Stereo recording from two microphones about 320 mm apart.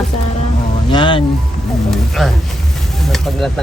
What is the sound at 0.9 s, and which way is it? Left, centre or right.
Speech, centre.